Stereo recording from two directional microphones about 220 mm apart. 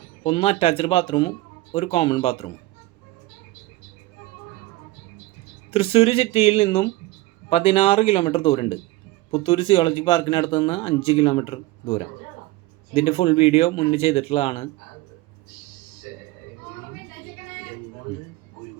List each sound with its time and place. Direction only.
0.2 s speech: 25° left (ahead or behind)
5.7 s speech: 25° left (ahead or behind)